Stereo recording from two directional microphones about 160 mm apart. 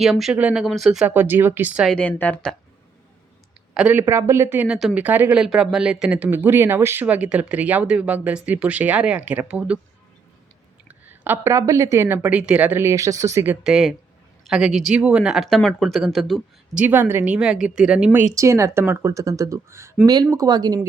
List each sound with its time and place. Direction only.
0.0 s speech: centre (ahead or behind)
2.0 s a woman's voice: 10° left (ahead or behind)
3.8 s speech: 10° right (ahead or behind)
11.1 s speech: 15° right (ahead or behind)
16.8 s speech: 10° right (ahead or behind)